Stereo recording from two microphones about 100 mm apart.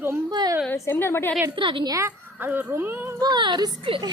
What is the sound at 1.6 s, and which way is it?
Speech, 55° right (ahead or behind).